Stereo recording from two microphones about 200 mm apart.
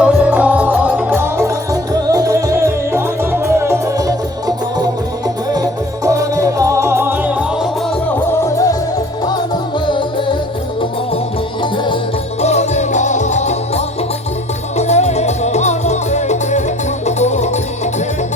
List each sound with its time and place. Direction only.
0.0 s music: 5° right (ahead or behind)
6.1 s music: 15° right (ahead or behind)
8.3 s music: 15° left (ahead or behind)
9.8 s music: 25° left (ahead or behind)
12.4 s music: 35° left (ahead or behind)